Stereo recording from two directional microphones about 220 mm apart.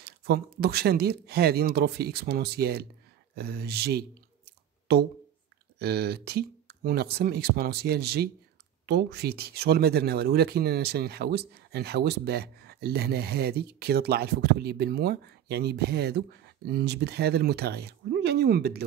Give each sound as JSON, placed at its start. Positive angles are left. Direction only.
{"t": 0.0, "sound": "speech", "side_deg": -45}
{"t": 5.8, "sound": "speech", "side_deg": -45}